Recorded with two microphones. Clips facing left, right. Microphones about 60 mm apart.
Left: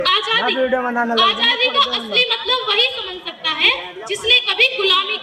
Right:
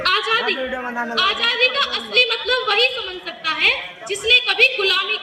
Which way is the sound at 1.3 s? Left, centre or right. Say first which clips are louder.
Left 1 dB; right.